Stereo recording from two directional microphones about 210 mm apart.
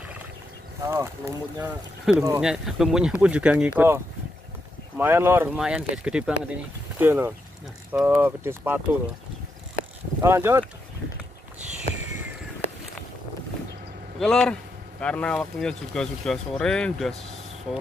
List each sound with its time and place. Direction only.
0.8 s speech: 15° right (ahead or behind)
10.2 s speech: 10° right (ahead or behind)
14.2 s speech: 5° left (ahead or behind)